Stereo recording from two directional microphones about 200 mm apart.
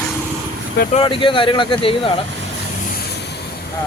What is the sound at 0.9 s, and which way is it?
Speech, 25° left (ahead or behind).